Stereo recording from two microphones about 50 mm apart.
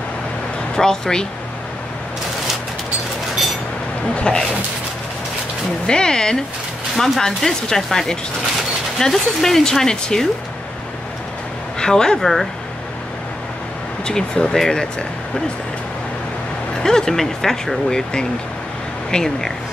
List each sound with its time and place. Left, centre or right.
0.7 s speech: centre
4.1 s speech: centre
5.9 s speech: centre
11.8 s speech: centre
14.0 s speech: centre
16.8 s speech: centre